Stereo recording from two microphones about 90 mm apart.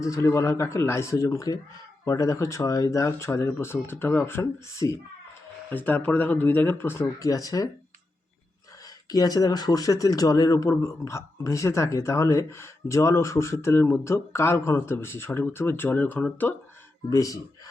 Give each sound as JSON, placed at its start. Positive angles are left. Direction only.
{"t": 0.0, "sound": "speech", "side_deg": 35}
{"t": 5.7, "sound": "speech", "side_deg": 20}
{"t": 7.2, "sound": "speech", "side_deg": 40}
{"t": 9.0, "sound": "speech", "side_deg": 45}
{"t": 17.1, "sound": "speech", "side_deg": 40}